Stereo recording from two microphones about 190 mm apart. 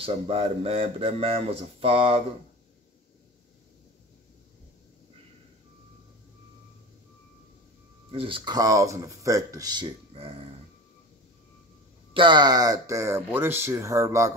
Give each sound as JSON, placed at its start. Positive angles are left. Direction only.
{"t": 0.0, "sound": "a man's voice", "side_deg": -30}
{"t": 8.1, "sound": "speech", "side_deg": -30}
{"t": 12.1, "sound": "speech", "side_deg": -25}